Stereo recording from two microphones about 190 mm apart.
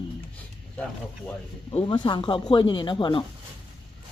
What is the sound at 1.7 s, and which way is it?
Speech, 25° left (ahead or behind).